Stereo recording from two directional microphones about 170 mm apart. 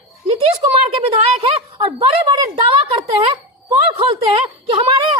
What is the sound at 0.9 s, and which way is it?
A woman's voice, 35° right (ahead or behind).